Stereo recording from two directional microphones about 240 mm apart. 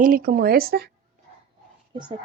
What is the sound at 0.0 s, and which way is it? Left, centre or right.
Speech, right.